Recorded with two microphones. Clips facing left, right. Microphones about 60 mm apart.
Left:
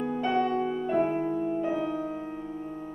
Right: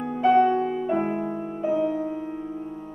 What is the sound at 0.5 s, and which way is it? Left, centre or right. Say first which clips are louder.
Music: right 5 dB; right.